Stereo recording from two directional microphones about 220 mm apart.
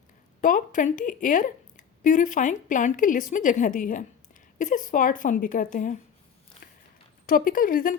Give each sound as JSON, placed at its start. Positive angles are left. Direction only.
{"t": 0.4, "sound": "a woman's voice", "side_deg": 35}
{"t": 7.3, "sound": "a woman's voice", "side_deg": 40}